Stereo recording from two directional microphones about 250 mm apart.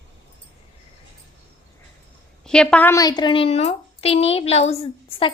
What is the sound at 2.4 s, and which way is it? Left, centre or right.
A woman's voice, centre.